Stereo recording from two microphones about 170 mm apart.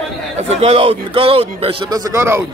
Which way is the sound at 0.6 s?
35° right (ahead or behind).